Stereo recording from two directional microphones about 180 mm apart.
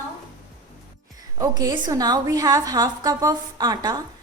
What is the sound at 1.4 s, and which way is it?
A woman's voice, 20° right (ahead or behind).